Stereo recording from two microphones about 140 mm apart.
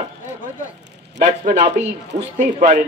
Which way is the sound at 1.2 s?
60° right (ahead or behind).